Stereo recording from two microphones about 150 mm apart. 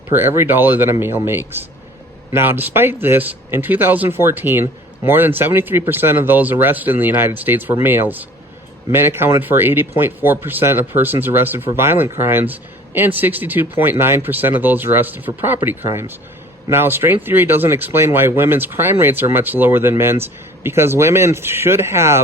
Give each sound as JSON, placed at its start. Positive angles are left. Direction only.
{"t": 0.1, "sound": "speech", "side_deg": -15}